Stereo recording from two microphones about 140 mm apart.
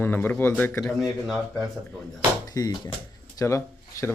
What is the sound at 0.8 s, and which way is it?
Speech, centre (ahead or behind).